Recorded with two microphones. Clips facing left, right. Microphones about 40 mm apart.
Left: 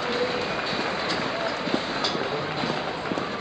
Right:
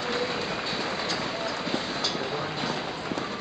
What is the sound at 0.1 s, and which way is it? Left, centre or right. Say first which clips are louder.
Run: left 3 dB; centre.